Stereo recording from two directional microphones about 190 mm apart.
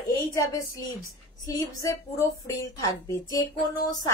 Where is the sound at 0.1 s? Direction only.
20° left (ahead or behind).